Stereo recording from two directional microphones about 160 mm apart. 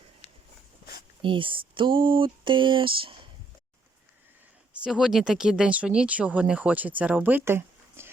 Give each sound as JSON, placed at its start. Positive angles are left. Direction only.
{"t": 0.2, "sound": "a sound", "side_deg": 40}
{"t": 1.2, "sound": "speech", "side_deg": -30}
{"t": 4.7, "sound": "speech", "side_deg": -5}